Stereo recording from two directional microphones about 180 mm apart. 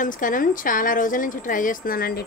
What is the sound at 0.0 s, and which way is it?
A woman's voice, 50° left (ahead or behind).